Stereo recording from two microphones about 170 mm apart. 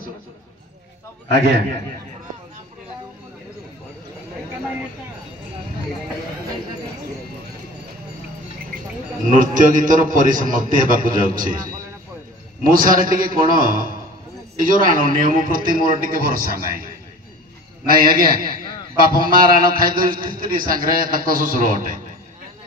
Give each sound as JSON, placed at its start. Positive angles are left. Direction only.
{"t": 9.3, "sound": "a man's voice", "side_deg": -50}